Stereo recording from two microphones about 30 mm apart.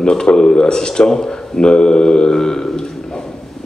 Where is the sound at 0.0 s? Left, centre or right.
Left.